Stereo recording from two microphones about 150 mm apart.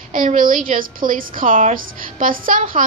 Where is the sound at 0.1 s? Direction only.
60° right (ahead or behind).